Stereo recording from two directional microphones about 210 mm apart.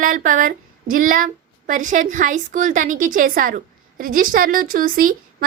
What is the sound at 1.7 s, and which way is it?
A woman's voice, 40° right (ahead or behind).